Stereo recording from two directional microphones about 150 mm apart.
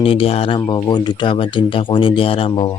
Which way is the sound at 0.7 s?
30° left (ahead or behind).